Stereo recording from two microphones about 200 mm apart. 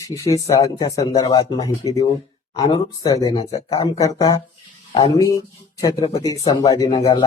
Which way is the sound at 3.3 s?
30° left (ahead or behind).